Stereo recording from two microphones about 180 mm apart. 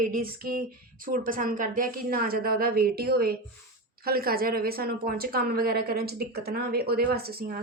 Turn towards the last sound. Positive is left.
turn(degrees=-60)  # may be behind; listen again after turning